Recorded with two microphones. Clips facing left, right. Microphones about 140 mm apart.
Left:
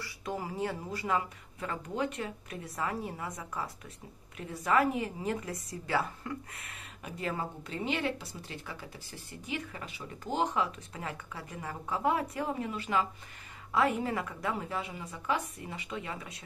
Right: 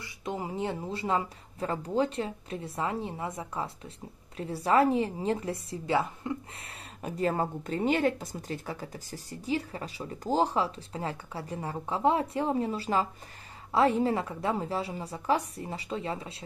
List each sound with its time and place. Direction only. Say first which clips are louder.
0.0 s a woman's voice: right 2 dB; 20° right (ahead or behind)
6.7 s a woman's voice: right 8 dB; 40° right (ahead or behind)